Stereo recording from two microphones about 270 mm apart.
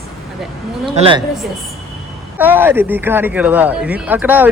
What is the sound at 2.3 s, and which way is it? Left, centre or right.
Speech, centre.